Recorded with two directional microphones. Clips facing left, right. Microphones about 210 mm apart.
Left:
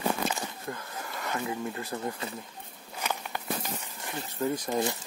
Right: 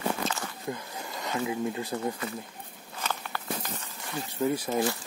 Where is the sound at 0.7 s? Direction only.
15° right (ahead or behind).